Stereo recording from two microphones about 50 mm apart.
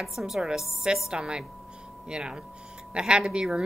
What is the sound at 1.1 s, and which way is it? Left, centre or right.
A woman's voice, centre.